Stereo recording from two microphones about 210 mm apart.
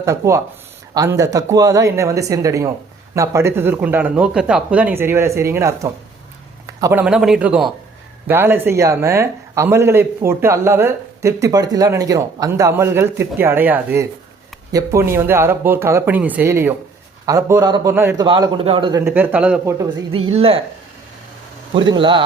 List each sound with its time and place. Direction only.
0.0 s a man's voice: 15° right (ahead or behind)
7.0 s a man's voice: 5° right (ahead or behind)
18.3 s a man's voice: 20° right (ahead or behind)
19.8 s a woman's voice: 25° right (ahead or behind)
21.7 s a woman's voice: 25° right (ahead or behind)